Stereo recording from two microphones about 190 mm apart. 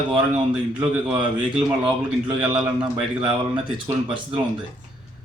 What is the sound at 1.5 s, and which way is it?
Speech, 25° right (ahead or behind).